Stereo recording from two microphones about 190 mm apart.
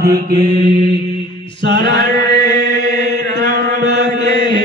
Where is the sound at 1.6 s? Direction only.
60° right (ahead or behind).